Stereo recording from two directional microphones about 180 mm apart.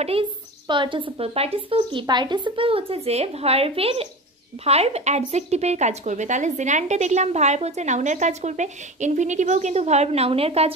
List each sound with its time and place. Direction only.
0.0 s speech: 30° right (ahead or behind)